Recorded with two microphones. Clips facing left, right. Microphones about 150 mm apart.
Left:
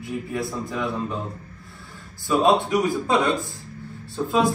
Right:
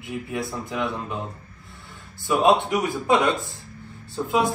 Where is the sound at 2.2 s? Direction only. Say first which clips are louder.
Even; 20° right (ahead or behind).